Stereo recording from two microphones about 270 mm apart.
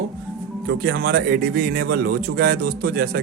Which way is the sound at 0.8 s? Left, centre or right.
Right.